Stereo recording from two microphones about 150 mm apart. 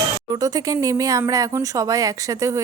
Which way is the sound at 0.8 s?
25° right (ahead or behind).